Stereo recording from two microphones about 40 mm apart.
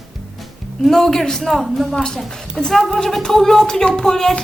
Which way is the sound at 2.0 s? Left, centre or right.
Centre.